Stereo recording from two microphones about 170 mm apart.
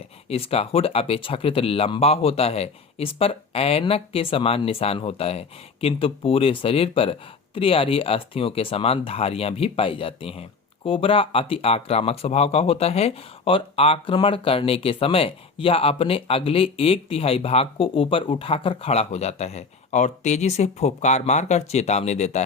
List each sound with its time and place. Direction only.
0.3 s speech: 35° left (ahead or behind)